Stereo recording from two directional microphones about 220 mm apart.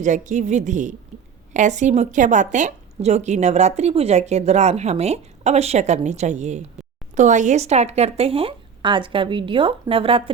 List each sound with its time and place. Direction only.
0.0 s a woman's voice: 35° right (ahead or behind)